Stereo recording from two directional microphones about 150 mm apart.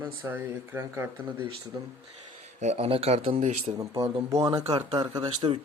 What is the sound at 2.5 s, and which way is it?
Speech, 45° right (ahead or behind).